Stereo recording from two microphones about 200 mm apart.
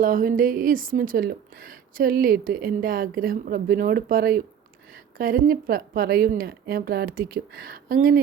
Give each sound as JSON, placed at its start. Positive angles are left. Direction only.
{"t": 0.0, "sound": "speech", "side_deg": -45}